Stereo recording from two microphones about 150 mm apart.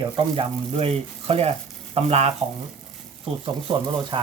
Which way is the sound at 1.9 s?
45° right (ahead or behind).